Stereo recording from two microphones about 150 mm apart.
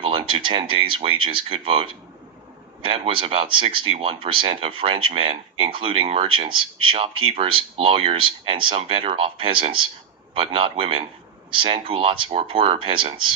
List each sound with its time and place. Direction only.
0.0 s speech: 35° right (ahead or behind)